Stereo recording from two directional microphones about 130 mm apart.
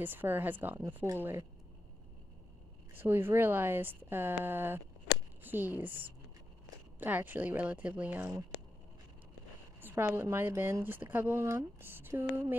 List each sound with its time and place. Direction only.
0.0 s speech: 15° right (ahead or behind)
2.9 s speech: 15° right (ahead or behind)
9.8 s speech: 15° right (ahead or behind)